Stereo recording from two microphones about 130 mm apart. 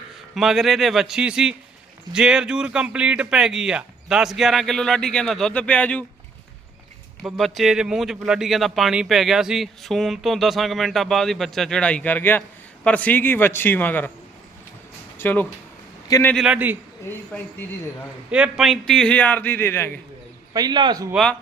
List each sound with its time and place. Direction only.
0.3 s speech: centre (ahead or behind)
7.2 s a man's voice: centre (ahead or behind)
15.2 s speech: 15° left (ahead or behind)
16.3 s speech: centre (ahead or behind)
17.1 s a man's voice: 15° left (ahead or behind)
18.3 s a man's voice: 10° right (ahead or behind); by 20.0 s 20° left (ahead or behind)
20.5 s speech: 30° right (ahead or behind)